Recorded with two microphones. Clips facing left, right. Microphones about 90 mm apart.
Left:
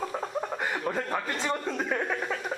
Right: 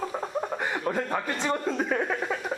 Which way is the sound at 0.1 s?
5° right (ahead or behind).